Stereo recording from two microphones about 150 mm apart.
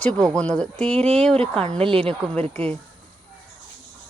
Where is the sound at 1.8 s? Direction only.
40° right (ahead or behind).